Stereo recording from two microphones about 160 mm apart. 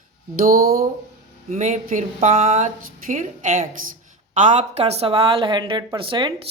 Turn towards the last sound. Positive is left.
turn(degrees=-35)  # may be behind; listen again after turning